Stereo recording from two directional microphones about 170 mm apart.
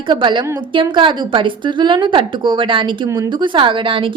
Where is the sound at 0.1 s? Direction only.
25° right (ahead or behind).